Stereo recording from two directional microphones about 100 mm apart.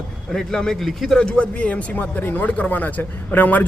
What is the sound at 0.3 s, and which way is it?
Speech, 5° left (ahead or behind).